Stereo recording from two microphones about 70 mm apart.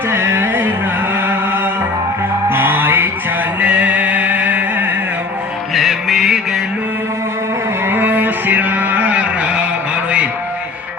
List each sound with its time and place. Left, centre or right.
0.1 s music: right
3.6 s music: centre
5.7 s music: centre
7.9 s a sound: right